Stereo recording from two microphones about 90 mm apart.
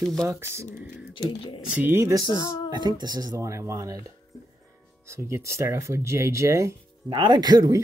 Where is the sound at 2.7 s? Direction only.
55° right (ahead or behind).